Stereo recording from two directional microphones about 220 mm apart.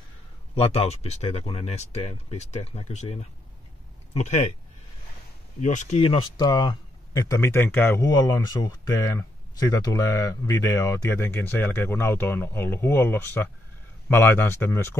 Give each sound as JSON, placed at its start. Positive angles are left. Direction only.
{"t": 0.6, "sound": "speech", "side_deg": 25}
{"t": 5.6, "sound": "speech", "side_deg": 35}